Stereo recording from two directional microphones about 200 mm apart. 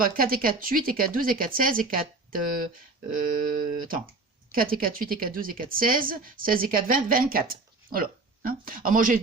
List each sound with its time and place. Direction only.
0.0 s speech: 45° right (ahead or behind)